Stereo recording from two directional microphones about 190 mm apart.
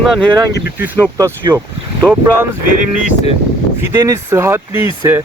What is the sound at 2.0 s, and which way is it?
Speech, 5° left (ahead or behind).